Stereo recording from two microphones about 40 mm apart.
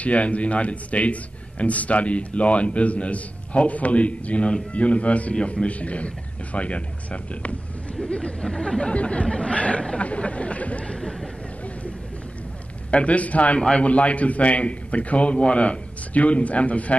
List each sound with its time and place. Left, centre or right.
0.0 s a man's voice: left
8.0 s speech: left
9.9 s a sound: left
12.9 s a man's voice: left
13.6 s a man's voice: left
13.8 s a man's voice: left